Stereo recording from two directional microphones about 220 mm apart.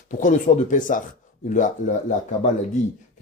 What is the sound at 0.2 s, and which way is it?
Speech, 35° left (ahead or behind).